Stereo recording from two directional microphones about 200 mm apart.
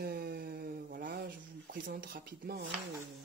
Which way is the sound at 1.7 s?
45° right (ahead or behind).